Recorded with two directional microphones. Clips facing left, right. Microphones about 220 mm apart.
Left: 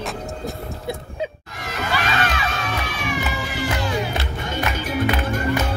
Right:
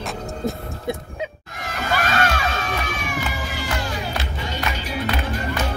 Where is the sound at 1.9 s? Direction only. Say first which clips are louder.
Right 2 dB; 45° right (ahead or behind).